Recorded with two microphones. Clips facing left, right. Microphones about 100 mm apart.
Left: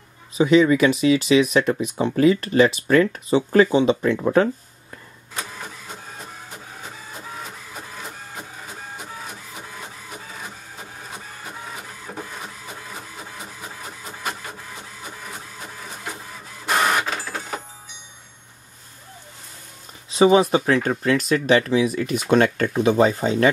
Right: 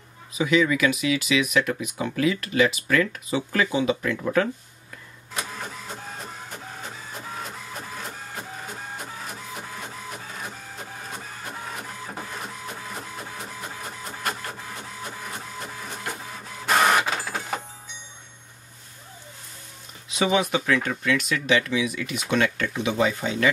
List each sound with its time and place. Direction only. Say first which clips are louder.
0.4 s speech: left 6 dB; 30° left (ahead or behind)
7.4 s printer: right 1 dB; centre (ahead or behind)
10.8 s printer: even; centre (ahead or behind)
20.1 s a sound: left 8 dB; 35° left (ahead or behind)
20.5 s speech: left 5 dB; 35° left (ahead or behind)